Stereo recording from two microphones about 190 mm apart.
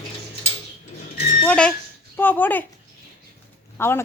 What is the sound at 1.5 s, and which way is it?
Speech, 5° left (ahead or behind).